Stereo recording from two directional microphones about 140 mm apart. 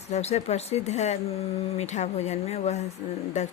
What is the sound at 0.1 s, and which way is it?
Speech, 50° left (ahead or behind).